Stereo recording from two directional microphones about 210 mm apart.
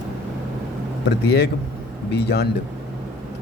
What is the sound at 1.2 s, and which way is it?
Speech, 50° left (ahead or behind).